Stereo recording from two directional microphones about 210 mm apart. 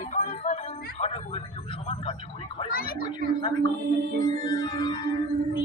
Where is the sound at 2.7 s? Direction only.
45° left (ahead or behind).